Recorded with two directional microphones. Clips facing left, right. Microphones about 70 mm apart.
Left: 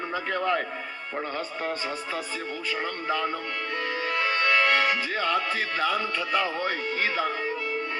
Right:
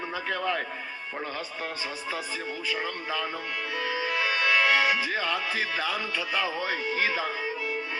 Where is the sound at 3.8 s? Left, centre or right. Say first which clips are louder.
Even; centre.